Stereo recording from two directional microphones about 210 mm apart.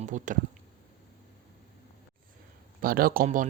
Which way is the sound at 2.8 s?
45° right (ahead or behind).